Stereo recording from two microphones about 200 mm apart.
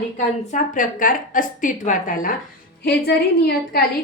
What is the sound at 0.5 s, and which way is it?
A woman's voice, 40° left (ahead or behind).